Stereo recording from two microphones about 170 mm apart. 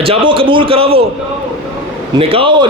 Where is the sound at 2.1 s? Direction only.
30° right (ahead or behind).